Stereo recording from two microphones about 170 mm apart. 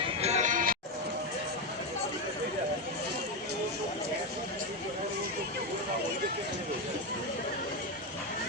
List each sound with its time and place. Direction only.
0.2 s music: 40° right (ahead or behind)